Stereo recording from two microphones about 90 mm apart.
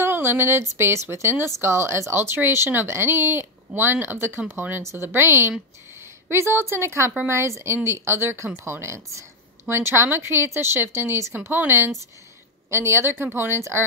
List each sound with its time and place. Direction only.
0.0 s speech: 25° right (ahead or behind)